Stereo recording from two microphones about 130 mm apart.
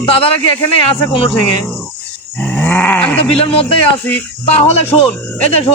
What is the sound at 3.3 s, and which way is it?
Speech, 45° left (ahead or behind).